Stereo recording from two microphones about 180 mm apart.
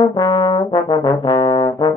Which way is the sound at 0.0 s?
25° left (ahead or behind).